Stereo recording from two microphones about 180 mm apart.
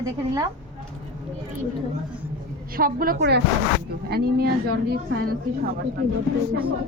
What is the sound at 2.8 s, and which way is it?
Speech, 55° right (ahead or behind).